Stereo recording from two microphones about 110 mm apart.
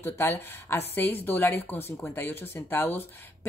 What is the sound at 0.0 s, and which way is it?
Speech, 20° left (ahead or behind).